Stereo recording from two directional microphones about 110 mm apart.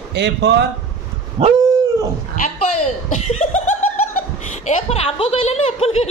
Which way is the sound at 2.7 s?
90° left.